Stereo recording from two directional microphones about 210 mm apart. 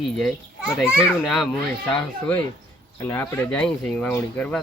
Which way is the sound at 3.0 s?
10° left (ahead or behind).